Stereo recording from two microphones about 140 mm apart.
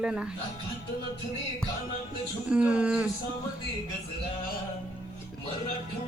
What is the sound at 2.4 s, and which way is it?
Speech, 10° right (ahead or behind).